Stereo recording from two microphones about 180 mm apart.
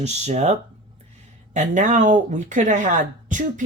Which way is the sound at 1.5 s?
40° right (ahead or behind).